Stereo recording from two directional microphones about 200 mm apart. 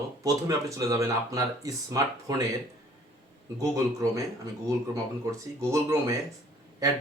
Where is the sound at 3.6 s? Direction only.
15° right (ahead or behind).